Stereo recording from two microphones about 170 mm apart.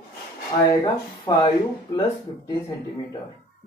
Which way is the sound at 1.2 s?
25° left (ahead or behind).